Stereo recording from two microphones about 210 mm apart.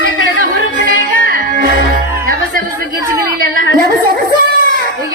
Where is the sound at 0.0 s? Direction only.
65° left (ahead or behind).